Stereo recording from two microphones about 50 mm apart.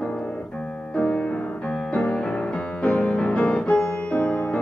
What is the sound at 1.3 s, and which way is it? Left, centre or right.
Music, left.